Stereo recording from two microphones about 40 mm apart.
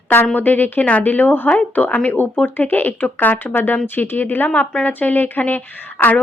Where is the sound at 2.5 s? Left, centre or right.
Left.